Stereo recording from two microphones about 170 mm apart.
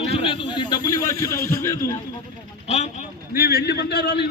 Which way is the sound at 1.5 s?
15° left (ahead or behind).